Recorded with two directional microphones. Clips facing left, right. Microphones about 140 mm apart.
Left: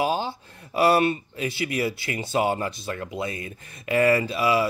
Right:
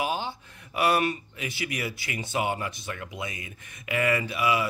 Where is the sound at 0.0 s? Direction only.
30° left (ahead or behind).